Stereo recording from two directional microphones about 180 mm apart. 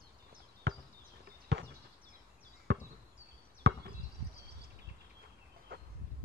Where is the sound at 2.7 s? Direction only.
70° right (ahead or behind).